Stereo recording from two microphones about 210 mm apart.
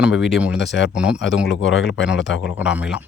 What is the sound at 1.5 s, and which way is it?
Speech, 60° left (ahead or behind).